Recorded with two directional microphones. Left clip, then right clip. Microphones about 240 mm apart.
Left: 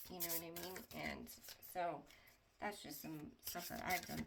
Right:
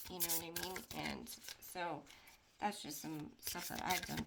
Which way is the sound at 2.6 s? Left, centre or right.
Right.